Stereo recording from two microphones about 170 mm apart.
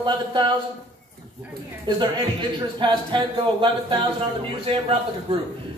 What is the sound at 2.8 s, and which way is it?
Speech, 30° right (ahead or behind).